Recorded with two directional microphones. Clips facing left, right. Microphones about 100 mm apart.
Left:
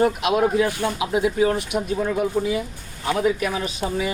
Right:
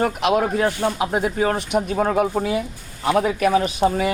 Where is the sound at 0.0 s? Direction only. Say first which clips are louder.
Even; 50° right (ahead or behind).